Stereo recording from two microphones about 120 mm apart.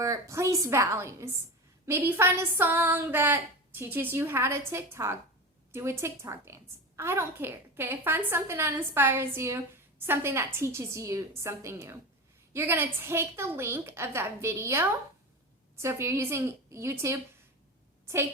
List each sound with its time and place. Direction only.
0.0 s a woman's voice: 25° right (ahead or behind)